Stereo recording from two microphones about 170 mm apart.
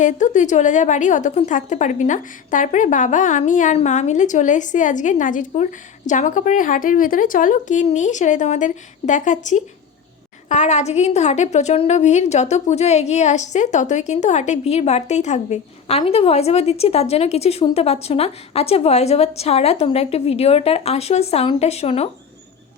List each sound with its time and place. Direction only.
0.0 s a woman's voice: 45° left (ahead or behind)